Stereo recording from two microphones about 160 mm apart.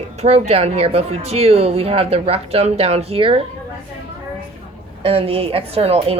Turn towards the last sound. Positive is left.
turn(degrees=-40)  # may be behind; listen again after turning